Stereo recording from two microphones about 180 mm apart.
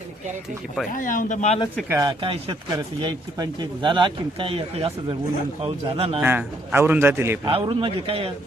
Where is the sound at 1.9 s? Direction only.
20° right (ahead or behind).